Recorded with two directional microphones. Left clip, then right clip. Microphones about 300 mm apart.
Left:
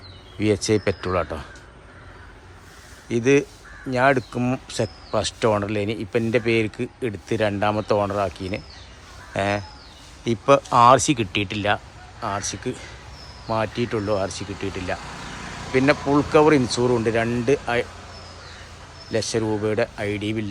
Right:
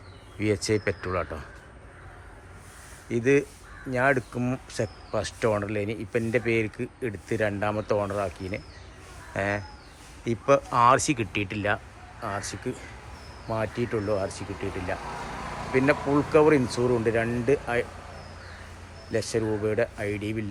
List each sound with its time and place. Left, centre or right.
0.3 s speech: centre
3.1 s speech: centre
19.1 s speech: centre